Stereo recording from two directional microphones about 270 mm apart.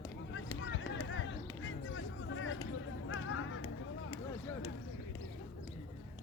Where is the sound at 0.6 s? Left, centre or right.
Left.